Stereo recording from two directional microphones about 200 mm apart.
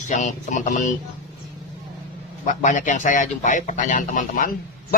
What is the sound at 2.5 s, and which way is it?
Speech, 40° left (ahead or behind).